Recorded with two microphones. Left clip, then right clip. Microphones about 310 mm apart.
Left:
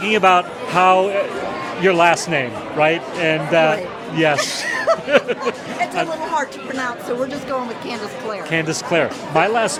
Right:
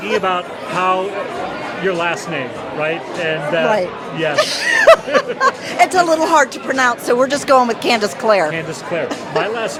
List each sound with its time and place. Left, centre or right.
0.0 s speech: left
4.4 s speech: right
5.4 s speech: right
8.4 s speech: left